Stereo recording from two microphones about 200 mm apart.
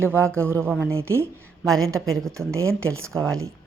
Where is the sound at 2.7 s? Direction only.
90° right.